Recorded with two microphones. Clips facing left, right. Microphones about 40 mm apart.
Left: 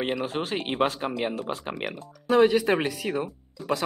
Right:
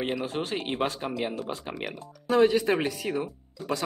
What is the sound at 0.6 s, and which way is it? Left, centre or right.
Speech, centre.